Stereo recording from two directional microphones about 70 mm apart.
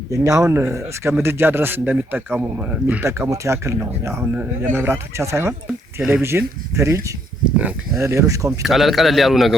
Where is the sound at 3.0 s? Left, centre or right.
Right.